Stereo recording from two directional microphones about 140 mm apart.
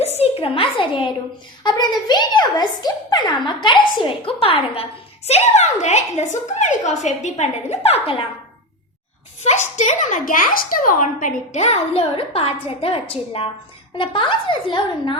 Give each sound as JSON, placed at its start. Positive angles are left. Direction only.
{"t": 0.2, "sound": "a woman's voice", "side_deg": 40}
{"t": 9.4, "sound": "a woman's voice", "side_deg": 55}